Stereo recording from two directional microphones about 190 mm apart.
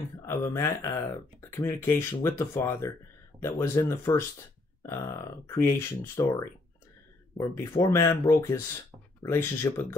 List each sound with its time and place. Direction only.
0.3 s speech: 15° left (ahead or behind)